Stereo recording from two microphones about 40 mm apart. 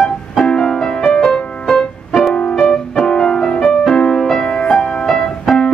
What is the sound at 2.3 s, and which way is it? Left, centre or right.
Music, left.